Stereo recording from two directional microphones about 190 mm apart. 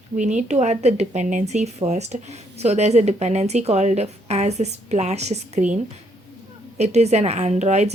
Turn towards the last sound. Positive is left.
turn(degrees=-35)  # may be behind; listen again after turning